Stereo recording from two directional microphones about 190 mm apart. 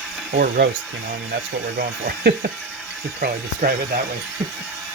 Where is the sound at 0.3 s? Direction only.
60° right (ahead or behind).